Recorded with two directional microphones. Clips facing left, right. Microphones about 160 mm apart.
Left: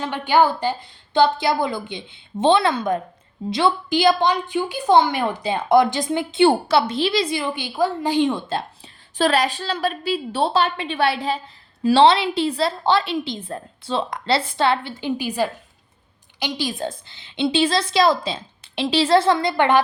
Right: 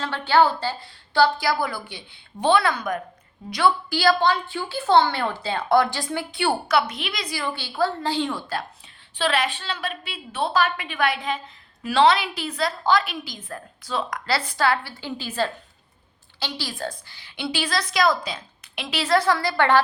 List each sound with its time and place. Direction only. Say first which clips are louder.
0.0 s a woman's voice: left 1 dB; 15° left (ahead or behind)
9.1 s a woman's voice: left 5 dB; 40° left (ahead or behind); by 19.8 s 20° left (ahead or behind)